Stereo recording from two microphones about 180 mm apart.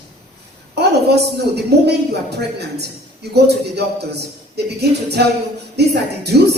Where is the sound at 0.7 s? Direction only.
65° right (ahead or behind).